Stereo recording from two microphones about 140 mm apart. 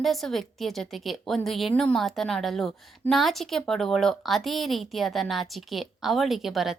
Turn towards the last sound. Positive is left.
turn(degrees=0)  # may be behind; listen again after turning